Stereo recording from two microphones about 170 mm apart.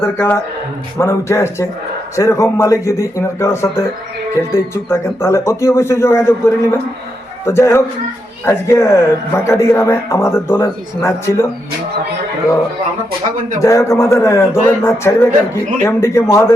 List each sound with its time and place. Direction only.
0.0 s speech: 15° left (ahead or behind)
13.6 s speech: 20° left (ahead or behind)